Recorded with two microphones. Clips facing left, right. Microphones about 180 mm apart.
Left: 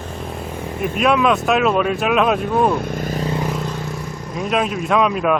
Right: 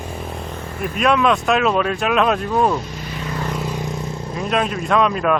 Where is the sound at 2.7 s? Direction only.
55° left (ahead or behind).